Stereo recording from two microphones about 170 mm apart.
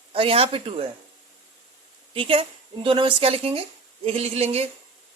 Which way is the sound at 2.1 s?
30° right (ahead or behind).